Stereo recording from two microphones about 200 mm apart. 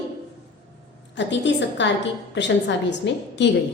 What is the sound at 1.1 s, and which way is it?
A woman's voice, 65° left (ahead or behind).